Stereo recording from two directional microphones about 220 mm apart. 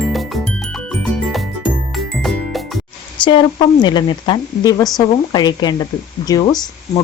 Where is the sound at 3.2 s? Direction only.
20° left (ahead or behind).